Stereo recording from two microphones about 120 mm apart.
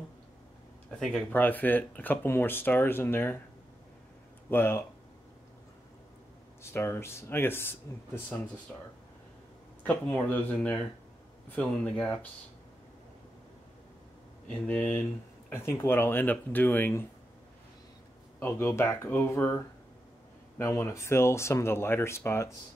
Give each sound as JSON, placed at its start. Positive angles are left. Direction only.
{"t": 0.8, "sound": "speech", "side_deg": 5}
{"t": 1.3, "sound": "speech", "side_deg": 15}
{"t": 4.5, "sound": "speech", "side_deg": 20}
{"t": 6.6, "sound": "speech", "side_deg": 20}
{"t": 9.8, "sound": "speech", "side_deg": 15}
{"t": 14.7, "sound": "speech", "side_deg": 15}
{"t": 18.4, "sound": "speech", "side_deg": 20}